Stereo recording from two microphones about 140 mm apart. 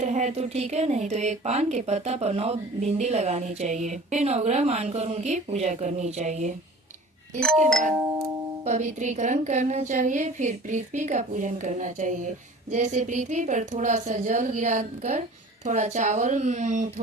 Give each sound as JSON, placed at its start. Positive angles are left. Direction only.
{"t": 0.0, "sound": "speech", "side_deg": -55}
{"t": 7.3, "sound": "music", "side_deg": 5}
{"t": 8.6, "sound": "a woman's voice", "side_deg": -55}